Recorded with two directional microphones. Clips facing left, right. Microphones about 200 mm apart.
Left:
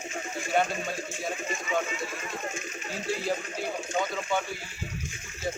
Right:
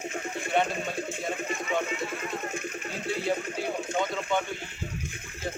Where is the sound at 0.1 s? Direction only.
60° right (ahead or behind).